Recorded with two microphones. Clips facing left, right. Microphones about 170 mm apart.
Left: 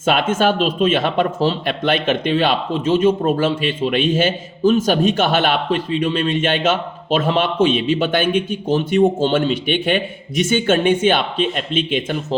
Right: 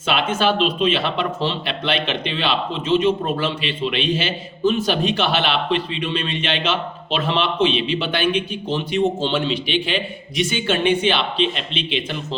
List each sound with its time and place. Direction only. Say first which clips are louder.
0.0 s speech: left 4 dB; 50° left (ahead or behind)